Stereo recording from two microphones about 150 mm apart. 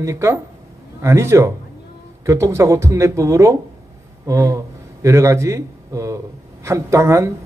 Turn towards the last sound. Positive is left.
turn(degrees=-20)  # may be behind; listen again after turning